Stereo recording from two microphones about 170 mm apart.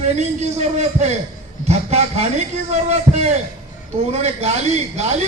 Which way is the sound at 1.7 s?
40° right (ahead or behind).